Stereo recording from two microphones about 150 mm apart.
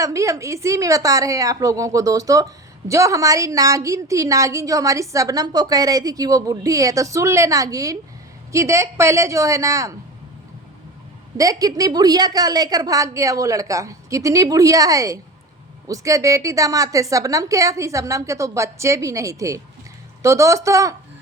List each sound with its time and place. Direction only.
0.0 s a woman's voice: 20° right (ahead or behind)
11.3 s a woman's voice: 25° right (ahead or behind)